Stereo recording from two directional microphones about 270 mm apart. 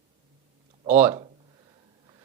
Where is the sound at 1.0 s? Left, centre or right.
Centre.